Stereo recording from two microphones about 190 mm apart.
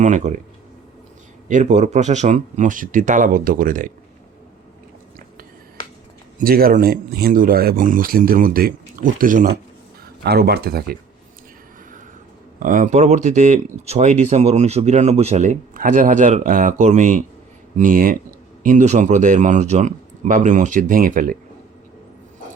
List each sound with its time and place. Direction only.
0.0 s speech: 40° right (ahead or behind)
1.5 s speech: 40° right (ahead or behind)
6.4 s speech: 50° right (ahead or behind)
10.2 s speech: 55° right (ahead or behind)
12.5 s speech: 45° right (ahead or behind)